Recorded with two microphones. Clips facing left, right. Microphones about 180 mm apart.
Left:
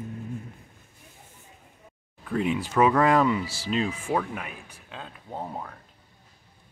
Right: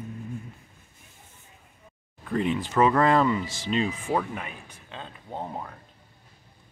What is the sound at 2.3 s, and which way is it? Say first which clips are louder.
Speech: even; 5° left (ahead or behind).